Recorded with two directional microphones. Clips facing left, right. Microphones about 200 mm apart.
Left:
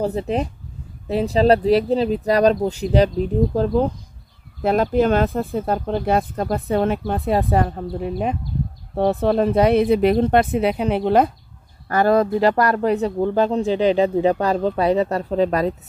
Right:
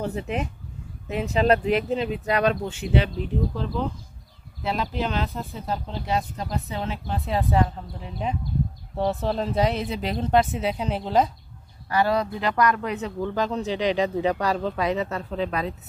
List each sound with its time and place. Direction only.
0.0 s speech: 35° left (ahead or behind); by 11.3 s 60° left (ahead or behind)
11.9 s speech: 50° left (ahead or behind)